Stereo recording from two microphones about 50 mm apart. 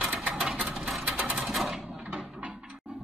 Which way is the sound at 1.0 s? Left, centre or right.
Right.